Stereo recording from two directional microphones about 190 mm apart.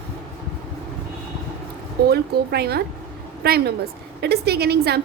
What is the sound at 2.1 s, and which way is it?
A woman's voice, 55° right (ahead or behind).